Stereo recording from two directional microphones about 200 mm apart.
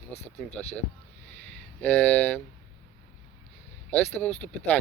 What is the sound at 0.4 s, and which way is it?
Speech, centre (ahead or behind).